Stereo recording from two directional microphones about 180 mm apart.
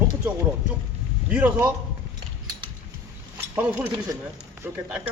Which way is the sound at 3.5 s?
10° right (ahead or behind).